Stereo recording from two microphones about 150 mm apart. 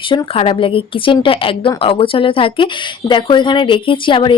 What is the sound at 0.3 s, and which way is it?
Speech, 35° left (ahead or behind).